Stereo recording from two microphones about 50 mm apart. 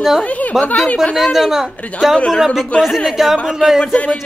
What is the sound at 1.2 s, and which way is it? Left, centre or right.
A man's voice, centre.